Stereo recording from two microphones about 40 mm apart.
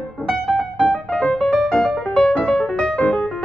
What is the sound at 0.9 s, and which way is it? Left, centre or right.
Piano, left.